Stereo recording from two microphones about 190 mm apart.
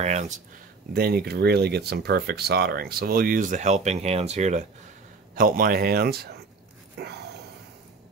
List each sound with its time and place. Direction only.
0.0 s speech: 40° right (ahead or behind)
0.9 s speech: 55° right (ahead or behind); by 4.6 s 40° right (ahead or behind)
5.3 s speech: 50° right (ahead or behind)
7.0 s a sound: 60° right (ahead or behind)